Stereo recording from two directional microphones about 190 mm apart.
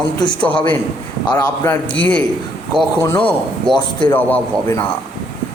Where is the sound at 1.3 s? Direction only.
10° left (ahead or behind).